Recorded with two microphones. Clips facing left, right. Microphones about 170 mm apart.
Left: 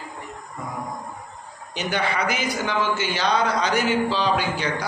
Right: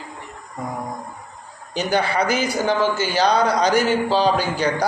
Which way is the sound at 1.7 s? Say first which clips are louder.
Right 5 dB; 35° right (ahead or behind).